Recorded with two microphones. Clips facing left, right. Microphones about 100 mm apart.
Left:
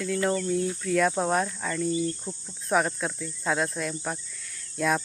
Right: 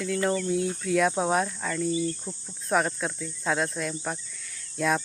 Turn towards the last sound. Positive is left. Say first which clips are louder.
# even
turn(degrees=0)  # may be behind; listen again after turning